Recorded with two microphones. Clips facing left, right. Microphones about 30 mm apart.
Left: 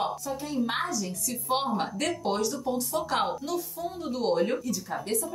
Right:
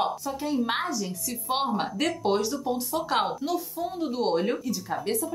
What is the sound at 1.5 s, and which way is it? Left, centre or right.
Speech, centre.